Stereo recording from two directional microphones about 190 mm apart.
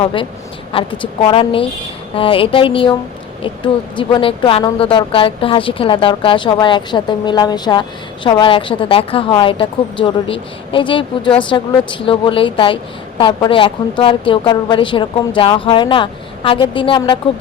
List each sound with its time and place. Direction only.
0.0 s speech: 25° left (ahead or behind)